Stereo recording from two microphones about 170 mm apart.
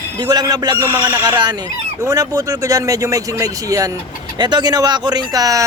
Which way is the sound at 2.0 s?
20° right (ahead or behind).